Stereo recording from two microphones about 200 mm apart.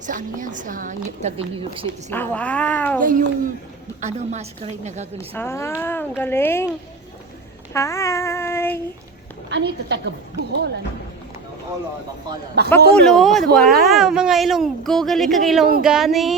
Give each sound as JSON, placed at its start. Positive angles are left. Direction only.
{"t": 0.0, "sound": "a woman's voice", "side_deg": -40}
{"t": 2.0, "sound": "speech", "side_deg": 10}
{"t": 3.0, "sound": "a woman's voice", "side_deg": -40}
{"t": 5.1, "sound": "speech", "side_deg": 10}
{"t": 7.7, "sound": "child singing", "side_deg": 15}
{"t": 9.5, "sound": "a woman's voice", "side_deg": -60}
{"t": 12.6, "sound": "a man's voice", "side_deg": -55}
{"t": 13.1, "sound": "speech", "side_deg": 0}